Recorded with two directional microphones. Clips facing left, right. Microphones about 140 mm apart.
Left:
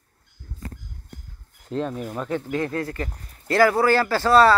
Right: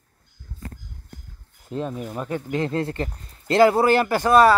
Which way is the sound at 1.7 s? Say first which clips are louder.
Left 1 dB; 5° right (ahead or behind).